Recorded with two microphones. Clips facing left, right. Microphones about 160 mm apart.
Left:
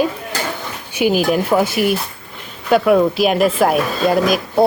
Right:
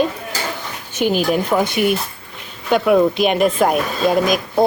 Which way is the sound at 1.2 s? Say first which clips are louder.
Left 2 dB; 5° left (ahead or behind).